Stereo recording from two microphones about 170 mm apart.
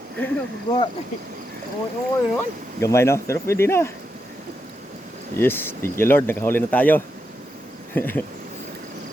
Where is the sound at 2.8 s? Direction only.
15° left (ahead or behind).